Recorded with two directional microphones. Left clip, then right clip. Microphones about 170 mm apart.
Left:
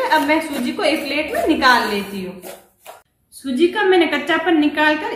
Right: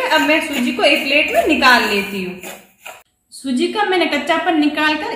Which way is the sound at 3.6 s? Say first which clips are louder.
Left 2 dB; 20° right (ahead or behind).